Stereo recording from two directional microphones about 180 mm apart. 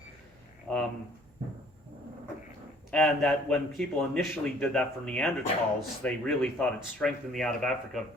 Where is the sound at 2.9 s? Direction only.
5° left (ahead or behind).